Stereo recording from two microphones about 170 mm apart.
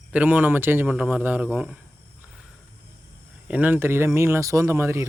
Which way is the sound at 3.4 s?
10° right (ahead or behind).